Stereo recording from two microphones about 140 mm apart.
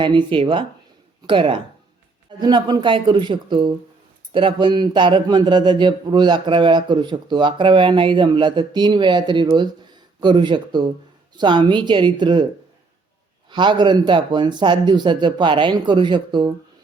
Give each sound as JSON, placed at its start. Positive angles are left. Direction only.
{"t": 0.0, "sound": "speech", "side_deg": -35}
{"t": 13.5, "sound": "speech", "side_deg": -35}